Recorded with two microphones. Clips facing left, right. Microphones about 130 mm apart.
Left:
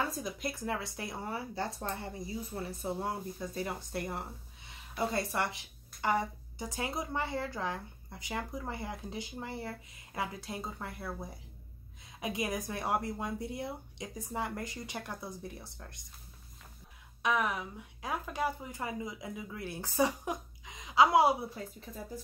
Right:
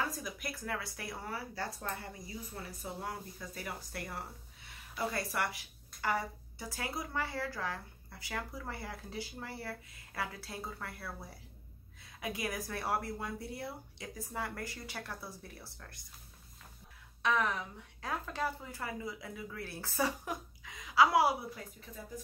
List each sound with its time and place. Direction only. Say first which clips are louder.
0.1 s a woman's voice: left 4 dB; 25° left (ahead or behind)
17.2 s a woman's voice: left 1 dB; 15° left (ahead or behind)